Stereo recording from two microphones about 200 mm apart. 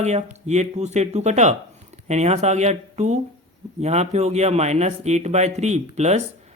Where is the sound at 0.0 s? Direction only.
35° right (ahead or behind).